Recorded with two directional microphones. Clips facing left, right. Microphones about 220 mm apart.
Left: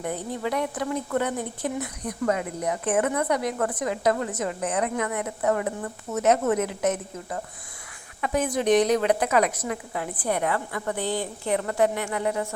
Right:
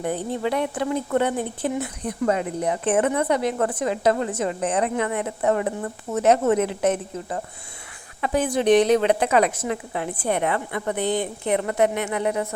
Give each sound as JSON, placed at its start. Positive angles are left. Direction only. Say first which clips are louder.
{"t": 0.0, "sound": "speech", "louder": "right 4 dB", "side_deg": -30}